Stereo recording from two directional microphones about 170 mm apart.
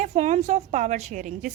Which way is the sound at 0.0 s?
40° right (ahead or behind).